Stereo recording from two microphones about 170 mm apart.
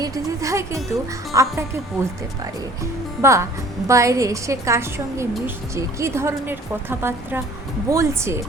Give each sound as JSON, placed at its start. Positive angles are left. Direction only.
{"t": 0.0, "sound": "a woman's voice", "side_deg": -20}
{"t": 3.2, "sound": "a woman's voice", "side_deg": -15}